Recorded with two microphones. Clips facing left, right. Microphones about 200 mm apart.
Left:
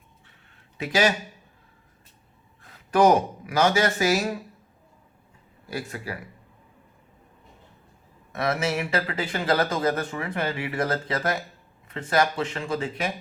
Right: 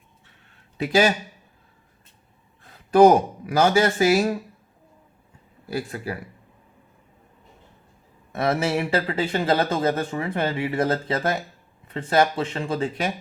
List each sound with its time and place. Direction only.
0.8 s speech: 30° right (ahead or behind)
2.9 s speech: 30° right (ahead or behind)
5.7 s speech: 30° right (ahead or behind)
8.3 s speech: 30° right (ahead or behind)